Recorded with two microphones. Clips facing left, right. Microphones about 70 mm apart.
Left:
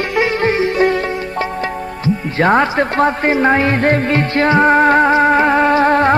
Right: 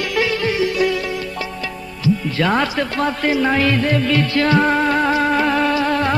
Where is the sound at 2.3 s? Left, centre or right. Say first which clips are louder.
Left 9 dB; left.